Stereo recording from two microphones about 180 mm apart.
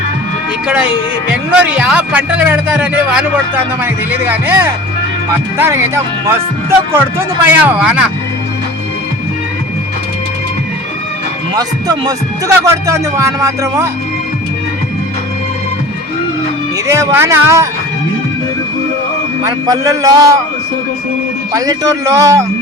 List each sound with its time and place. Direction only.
1.3 s speech: 10° right (ahead or behind)
11.5 s a man's voice: 20° right (ahead or behind)
16.8 s speech: 15° right (ahead or behind)
19.5 s a man's voice: 20° right (ahead or behind)
21.5 s speech: 20° right (ahead or behind)